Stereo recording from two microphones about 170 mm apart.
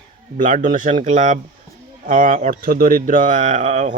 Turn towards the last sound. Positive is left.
turn(degrees=-45)  # may be behind; listen again after turning